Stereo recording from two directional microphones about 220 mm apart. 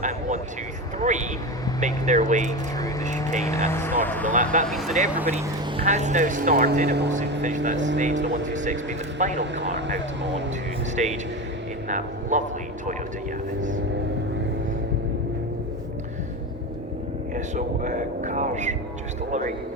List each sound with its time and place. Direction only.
0.0 s speech: 30° right (ahead or behind)
2.5 s speech: 15° left (ahead or behind)
5.2 s speech: 30° right (ahead or behind); by 7.2 s 50° right (ahead or behind)
7.4 s speech: 35° right (ahead or behind)
8.2 s speech: 50° right (ahead or behind)
8.5 s speech: 35° right (ahead or behind)
9.7 s speech: 55° right (ahead or behind)
10.9 s speech: 30° right (ahead or behind)
17.3 s speech: 35° right (ahead or behind)